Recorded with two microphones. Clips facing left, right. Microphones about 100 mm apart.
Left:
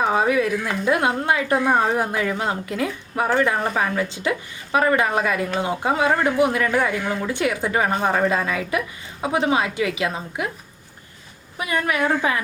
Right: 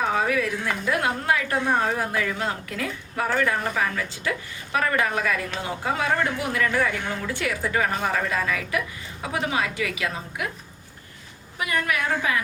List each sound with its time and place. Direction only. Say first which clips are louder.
0.0 s a woman's voice: left 4 dB; 25° left (ahead or behind)
11.5 s a woman's voice: left 3 dB; 25° left (ahead or behind)